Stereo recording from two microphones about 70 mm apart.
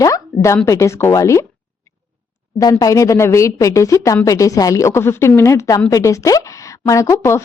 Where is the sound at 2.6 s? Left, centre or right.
Left.